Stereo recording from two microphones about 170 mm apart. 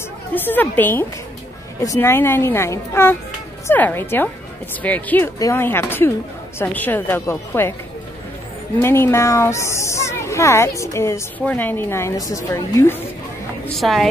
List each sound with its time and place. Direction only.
0.3 s speech: 10° left (ahead or behind)
8.8 s speech: 15° left (ahead or behind)
13.7 s a woman's voice: centre (ahead or behind)